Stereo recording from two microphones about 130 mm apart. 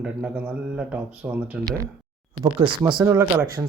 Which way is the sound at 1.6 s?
25° right (ahead or behind).